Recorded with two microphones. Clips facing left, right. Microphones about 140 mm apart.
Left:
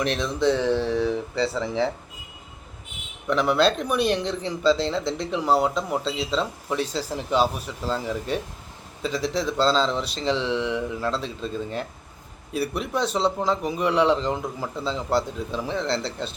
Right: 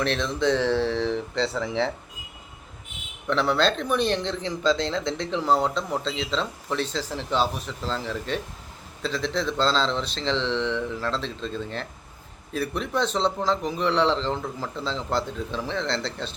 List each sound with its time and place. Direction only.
0.0 s speech: 5° left (ahead or behind)
3.2 s speech: 10° left (ahead or behind)